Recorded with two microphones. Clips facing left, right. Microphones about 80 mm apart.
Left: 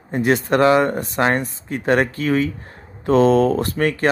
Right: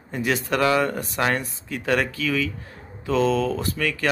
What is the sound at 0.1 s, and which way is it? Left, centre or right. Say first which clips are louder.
Speech: left 6 dB; left.